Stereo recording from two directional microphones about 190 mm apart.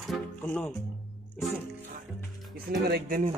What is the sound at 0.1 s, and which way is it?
Speech, 10° left (ahead or behind).